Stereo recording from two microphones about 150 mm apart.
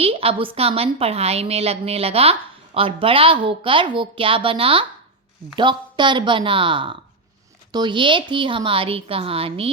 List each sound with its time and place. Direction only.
0.0 s a woman's voice: 40° right (ahead or behind)